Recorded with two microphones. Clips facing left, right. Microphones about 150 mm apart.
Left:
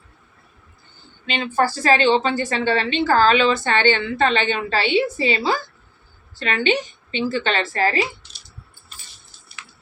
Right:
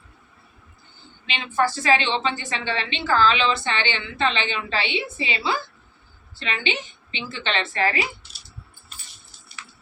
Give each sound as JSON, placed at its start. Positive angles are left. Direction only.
{"t": 1.3, "sound": "a woman's voice", "side_deg": 40}